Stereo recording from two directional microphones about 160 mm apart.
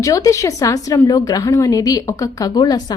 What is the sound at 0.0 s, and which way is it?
A woman's voice, 20° left (ahead or behind).